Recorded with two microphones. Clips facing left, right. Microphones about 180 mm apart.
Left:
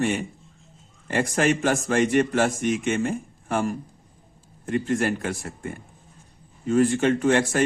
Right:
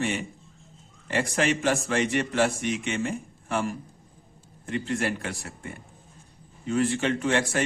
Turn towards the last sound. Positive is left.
turn(degrees=45)  # may be behind; listen again after turning